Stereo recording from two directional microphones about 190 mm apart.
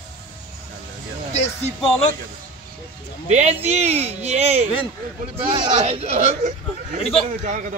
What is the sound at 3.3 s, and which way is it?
Speech, 35° right (ahead or behind).